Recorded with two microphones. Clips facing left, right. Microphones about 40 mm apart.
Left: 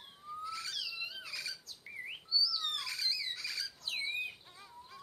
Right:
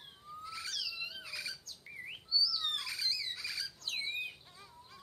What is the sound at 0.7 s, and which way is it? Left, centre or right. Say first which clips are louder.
Cat: even; centre.